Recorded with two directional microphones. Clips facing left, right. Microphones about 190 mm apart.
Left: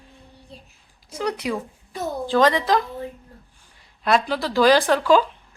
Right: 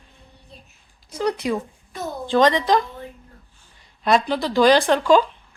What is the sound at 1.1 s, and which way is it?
Speech, 10° left (ahead or behind).